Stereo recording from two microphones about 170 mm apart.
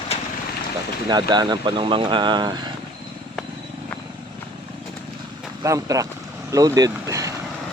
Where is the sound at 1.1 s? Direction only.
25° right (ahead or behind).